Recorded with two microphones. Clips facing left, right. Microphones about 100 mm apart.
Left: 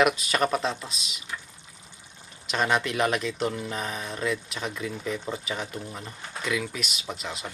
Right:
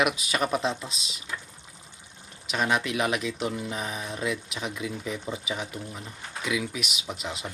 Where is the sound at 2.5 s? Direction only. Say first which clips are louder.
Left 1 dB; 5° right (ahead or behind).